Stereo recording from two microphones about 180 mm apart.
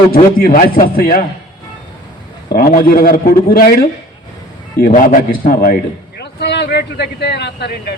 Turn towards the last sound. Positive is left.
turn(degrees=65)  # may be behind; listen again after turning